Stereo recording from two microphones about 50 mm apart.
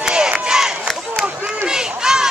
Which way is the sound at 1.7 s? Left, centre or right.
Centre.